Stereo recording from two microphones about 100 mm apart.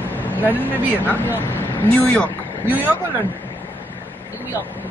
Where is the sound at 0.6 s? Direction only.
20° right (ahead or behind).